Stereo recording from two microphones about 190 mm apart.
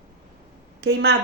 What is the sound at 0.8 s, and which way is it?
Speech, 60° right (ahead or behind).